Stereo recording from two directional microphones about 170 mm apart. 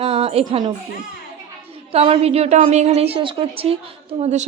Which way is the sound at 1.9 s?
35° right (ahead or behind).